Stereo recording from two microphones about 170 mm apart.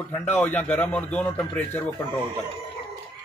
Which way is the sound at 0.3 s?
10° left (ahead or behind).